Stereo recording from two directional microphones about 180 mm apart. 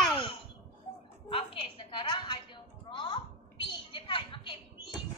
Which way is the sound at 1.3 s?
30° left (ahead or behind).